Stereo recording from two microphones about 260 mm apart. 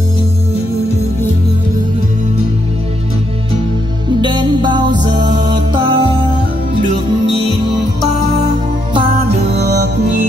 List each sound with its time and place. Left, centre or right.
4.2 s music: centre
9.2 s music: right